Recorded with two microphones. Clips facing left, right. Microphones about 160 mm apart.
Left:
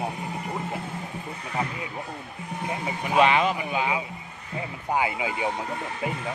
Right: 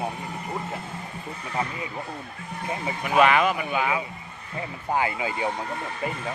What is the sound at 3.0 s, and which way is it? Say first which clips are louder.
Speech: right 1 dB; 25° left (ahead or behind).